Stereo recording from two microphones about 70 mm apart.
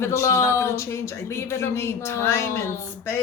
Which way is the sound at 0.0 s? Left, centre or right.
Left.